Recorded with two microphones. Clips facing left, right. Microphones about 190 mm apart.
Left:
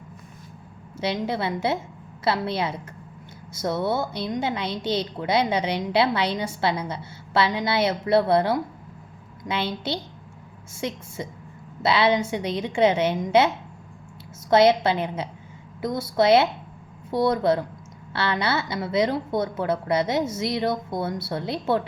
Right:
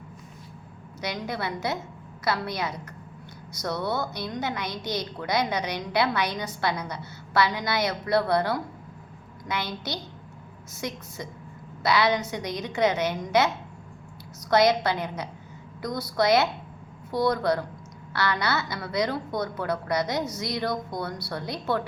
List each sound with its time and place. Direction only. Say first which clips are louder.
0.9 s a woman's voice: left 6 dB; 25° left (ahead or behind)
14.5 s a woman's voice: left 4 dB; 25° left (ahead or behind)